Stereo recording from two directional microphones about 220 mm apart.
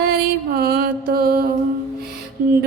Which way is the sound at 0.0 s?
45° right (ahead or behind).